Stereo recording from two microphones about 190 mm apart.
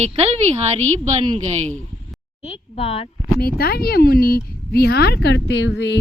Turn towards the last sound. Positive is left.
turn(degrees=70)  # may be behind; listen again after turning